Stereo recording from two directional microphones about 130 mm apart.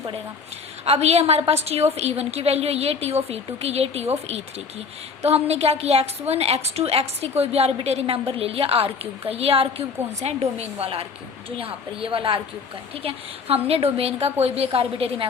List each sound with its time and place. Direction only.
0.9 s a woman's voice: 55° right (ahead or behind)